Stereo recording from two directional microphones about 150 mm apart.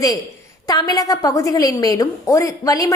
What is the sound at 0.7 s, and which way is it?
A woman's voice, 25° left (ahead or behind).